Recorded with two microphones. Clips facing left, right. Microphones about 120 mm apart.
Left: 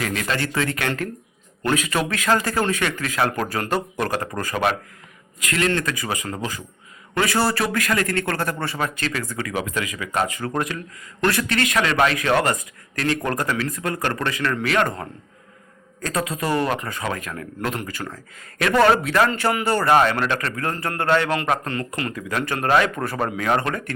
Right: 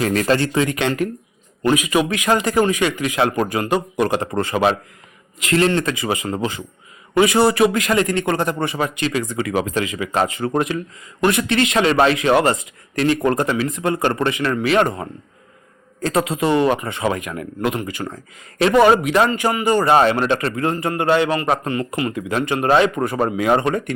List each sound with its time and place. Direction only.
0.1 s speech: 40° right (ahead or behind)
0.3 s a man's voice: 20° right (ahead or behind)
21.7 s speech: 15° right (ahead or behind)